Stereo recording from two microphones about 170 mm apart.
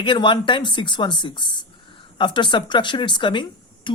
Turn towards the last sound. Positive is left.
turn(degrees=30)  # may be behind; listen again after turning